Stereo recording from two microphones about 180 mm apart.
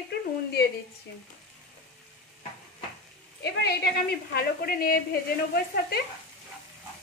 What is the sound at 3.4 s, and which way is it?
A woman's voice, 60° left (ahead or behind).